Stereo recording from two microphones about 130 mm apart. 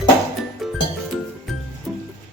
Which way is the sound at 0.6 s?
Centre (ahead or behind).